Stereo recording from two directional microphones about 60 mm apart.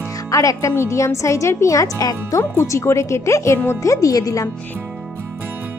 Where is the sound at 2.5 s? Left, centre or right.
Left.